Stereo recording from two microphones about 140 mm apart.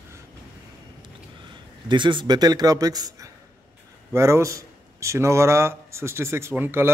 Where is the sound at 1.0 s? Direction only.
35° right (ahead or behind).